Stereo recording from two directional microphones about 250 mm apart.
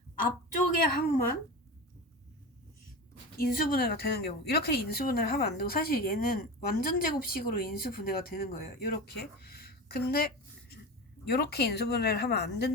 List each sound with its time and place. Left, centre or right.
0.9 s speech: left
3.3 s speech: left